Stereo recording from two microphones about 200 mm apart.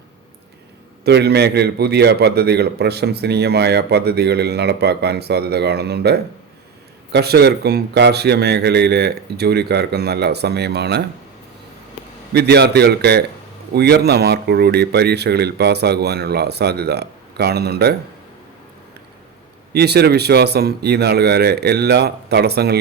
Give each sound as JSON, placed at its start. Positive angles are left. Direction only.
{"t": 1.0, "sound": "a man's voice", "side_deg": -55}
{"t": 12.3, "sound": "speech", "side_deg": -55}
{"t": 19.7, "sound": "speech", "side_deg": -55}